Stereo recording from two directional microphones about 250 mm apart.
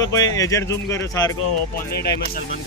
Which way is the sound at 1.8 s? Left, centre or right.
Left.